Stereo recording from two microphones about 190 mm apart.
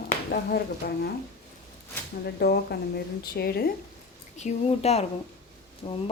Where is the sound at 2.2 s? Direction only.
55° left (ahead or behind).